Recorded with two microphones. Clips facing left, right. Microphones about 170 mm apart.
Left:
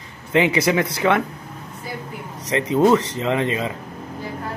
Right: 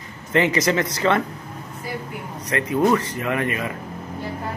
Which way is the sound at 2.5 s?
20° left (ahead or behind).